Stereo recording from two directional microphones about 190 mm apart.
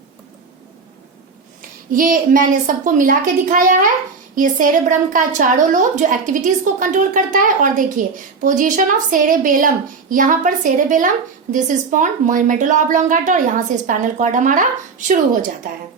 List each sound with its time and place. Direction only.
1.9 s a woman's voice: 45° right (ahead or behind)